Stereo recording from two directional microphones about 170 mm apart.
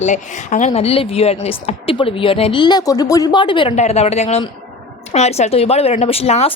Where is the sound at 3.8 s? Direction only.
40° left (ahead or behind).